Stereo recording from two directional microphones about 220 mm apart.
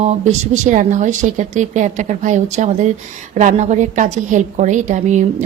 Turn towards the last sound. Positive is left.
turn(degrees=-35)  # may be behind; listen again after turning